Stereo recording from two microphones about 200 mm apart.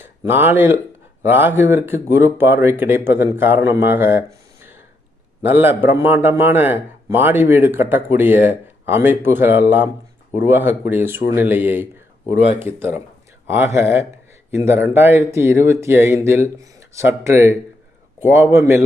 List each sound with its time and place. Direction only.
0.0 s a man's voice: 10° right (ahead or behind)
12.2 s speech: 30° left (ahead or behind)
12.5 s a man's voice: 10° right (ahead or behind)